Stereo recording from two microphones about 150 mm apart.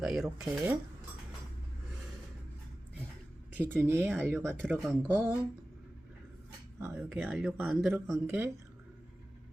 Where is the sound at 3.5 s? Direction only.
15° right (ahead or behind).